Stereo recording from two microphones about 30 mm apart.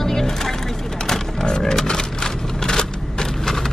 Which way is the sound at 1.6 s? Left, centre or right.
Centre.